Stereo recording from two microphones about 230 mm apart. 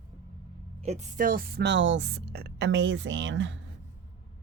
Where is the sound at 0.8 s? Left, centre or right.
Right.